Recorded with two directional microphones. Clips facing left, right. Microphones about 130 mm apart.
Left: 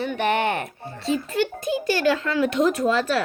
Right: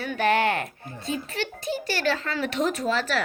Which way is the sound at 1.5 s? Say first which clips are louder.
Left 4 dB; 50° left (ahead or behind).